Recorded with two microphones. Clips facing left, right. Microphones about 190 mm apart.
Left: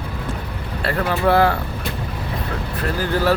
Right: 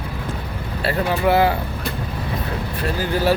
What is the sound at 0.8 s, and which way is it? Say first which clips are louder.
Speech: even; 25° right (ahead or behind).